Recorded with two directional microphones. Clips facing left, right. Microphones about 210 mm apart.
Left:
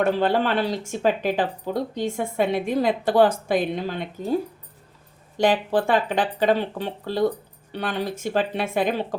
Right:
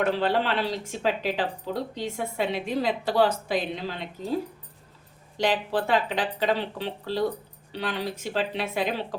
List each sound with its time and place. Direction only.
0.1 s a woman's voice: 45° left (ahead or behind)
5.4 s a woman's voice: 50° left (ahead or behind)